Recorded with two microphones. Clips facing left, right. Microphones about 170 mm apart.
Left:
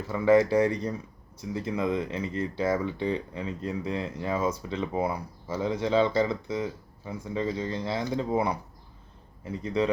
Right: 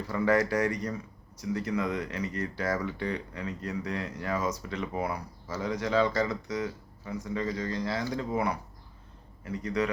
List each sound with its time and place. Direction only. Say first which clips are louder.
0.1 s speech: left 5 dB; 25° left (ahead or behind)